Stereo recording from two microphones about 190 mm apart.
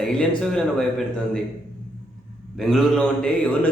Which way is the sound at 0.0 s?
5° left (ahead or behind).